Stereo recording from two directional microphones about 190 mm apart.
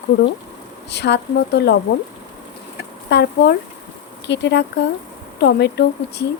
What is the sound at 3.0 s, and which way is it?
Speech, 60° left (ahead or behind).